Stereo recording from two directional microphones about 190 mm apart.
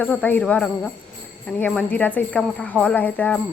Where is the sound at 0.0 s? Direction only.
10° left (ahead or behind).